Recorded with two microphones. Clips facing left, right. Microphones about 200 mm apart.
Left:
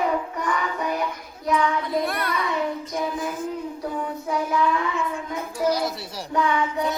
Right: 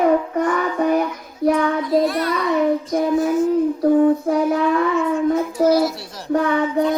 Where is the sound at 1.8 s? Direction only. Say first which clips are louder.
Right 7 dB; 55° left (ahead or behind).